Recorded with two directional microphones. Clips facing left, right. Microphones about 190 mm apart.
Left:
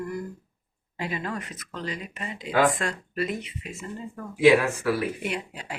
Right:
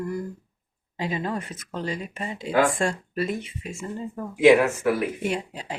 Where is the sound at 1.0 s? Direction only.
30° right (ahead or behind); by 3.9 s 45° right (ahead or behind).